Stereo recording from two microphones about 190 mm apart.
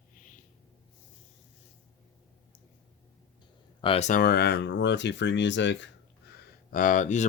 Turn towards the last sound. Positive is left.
turn(degrees=40)  # may be behind; listen again after turning